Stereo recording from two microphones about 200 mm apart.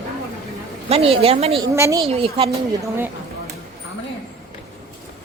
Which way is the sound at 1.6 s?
15° right (ahead or behind).